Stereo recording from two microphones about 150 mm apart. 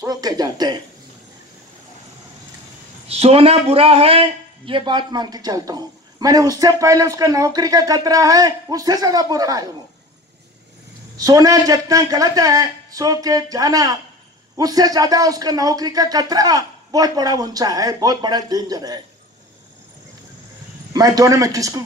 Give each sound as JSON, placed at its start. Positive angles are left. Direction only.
{"t": 0.0, "sound": "a man's voice", "side_deg": -25}
{"t": 3.1, "sound": "a man's voice", "side_deg": -40}
{"t": 11.1, "sound": "a man's voice", "side_deg": -25}
{"t": 20.9, "sound": "a man's voice", "side_deg": -25}